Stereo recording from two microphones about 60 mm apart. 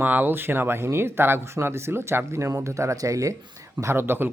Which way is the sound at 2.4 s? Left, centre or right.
Right.